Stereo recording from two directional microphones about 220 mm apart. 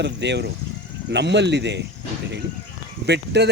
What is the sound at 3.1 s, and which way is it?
Speech, 50° right (ahead or behind).